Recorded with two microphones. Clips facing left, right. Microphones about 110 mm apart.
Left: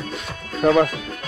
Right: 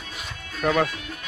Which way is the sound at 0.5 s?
35° left (ahead or behind).